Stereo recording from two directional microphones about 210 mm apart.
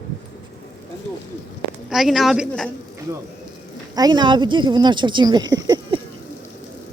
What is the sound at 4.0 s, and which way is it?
Speech, 20° right (ahead or behind).